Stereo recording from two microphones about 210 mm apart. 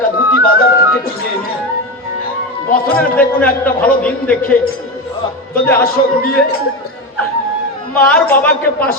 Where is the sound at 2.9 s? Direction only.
5° left (ahead or behind).